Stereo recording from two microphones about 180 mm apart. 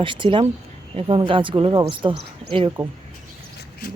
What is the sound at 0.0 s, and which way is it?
Speech, 30° right (ahead or behind).